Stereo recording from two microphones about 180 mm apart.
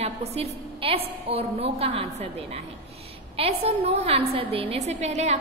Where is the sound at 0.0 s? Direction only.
35° right (ahead or behind).